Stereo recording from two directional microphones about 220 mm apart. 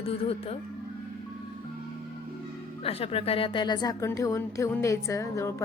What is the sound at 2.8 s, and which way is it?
Speech, 25° left (ahead or behind).